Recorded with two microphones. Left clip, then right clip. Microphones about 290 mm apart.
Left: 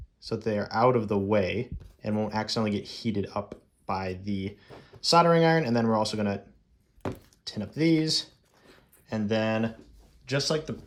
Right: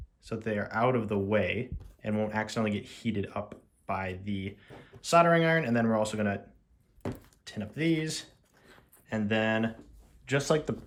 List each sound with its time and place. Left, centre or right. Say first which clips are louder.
0.3 s speech: left 4 dB; centre